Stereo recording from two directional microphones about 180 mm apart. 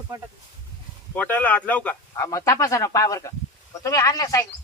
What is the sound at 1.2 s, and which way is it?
Speech, 10° left (ahead or behind).